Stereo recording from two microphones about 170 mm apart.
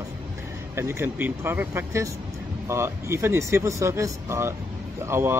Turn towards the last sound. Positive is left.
turn(degrees=-15)  # may be behind; listen again after turning